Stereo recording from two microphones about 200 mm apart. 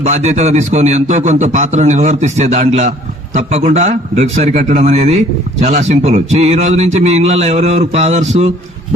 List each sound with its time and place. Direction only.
0.0 s a man's voice: 35° right (ahead or behind)